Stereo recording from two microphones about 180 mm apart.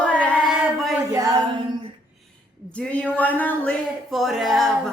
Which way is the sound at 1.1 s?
20° right (ahead or behind).